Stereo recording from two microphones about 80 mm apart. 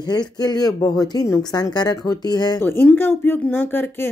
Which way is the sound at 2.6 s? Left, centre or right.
Left.